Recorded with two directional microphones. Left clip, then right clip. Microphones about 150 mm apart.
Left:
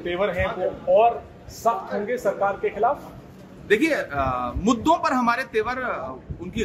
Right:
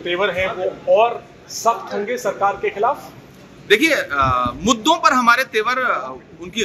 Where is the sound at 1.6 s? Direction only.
25° right (ahead or behind).